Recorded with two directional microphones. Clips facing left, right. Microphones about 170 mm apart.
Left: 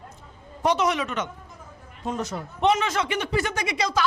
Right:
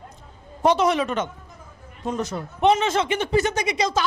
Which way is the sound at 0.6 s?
30° right (ahead or behind).